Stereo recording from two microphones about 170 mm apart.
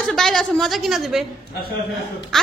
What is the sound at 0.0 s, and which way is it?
A woman's voice, centre (ahead or behind).